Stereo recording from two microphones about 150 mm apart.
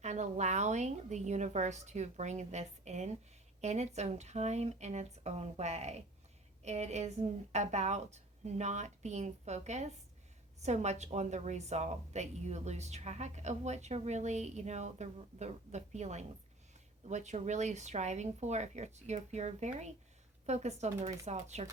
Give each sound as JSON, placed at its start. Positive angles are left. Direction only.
{"t": 0.0, "sound": "a woman's voice", "side_deg": -50}